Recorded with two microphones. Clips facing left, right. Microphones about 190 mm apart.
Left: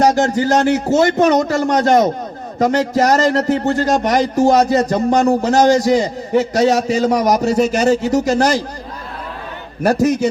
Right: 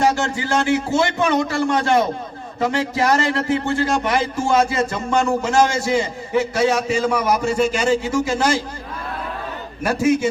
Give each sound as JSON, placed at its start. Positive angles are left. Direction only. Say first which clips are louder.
{"t": 0.0, "sound": "speech", "louder": "left 6 dB", "side_deg": 40}
{"t": 9.8, "sound": "speech", "louder": "left 3 dB", "side_deg": 40}